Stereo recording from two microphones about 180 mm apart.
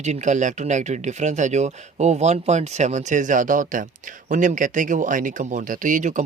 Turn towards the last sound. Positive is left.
turn(degrees=-45)  # may be behind; listen again after turning